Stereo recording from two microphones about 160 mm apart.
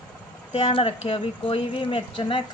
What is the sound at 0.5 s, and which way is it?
Speech, 35° left (ahead or behind).